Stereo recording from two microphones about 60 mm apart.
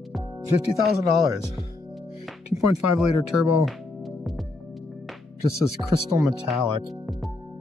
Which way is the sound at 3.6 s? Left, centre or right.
Centre.